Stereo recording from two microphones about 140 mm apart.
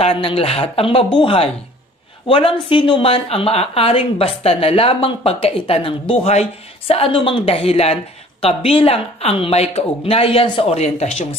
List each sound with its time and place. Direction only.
0.0 s a woman's voice: 40° left (ahead or behind)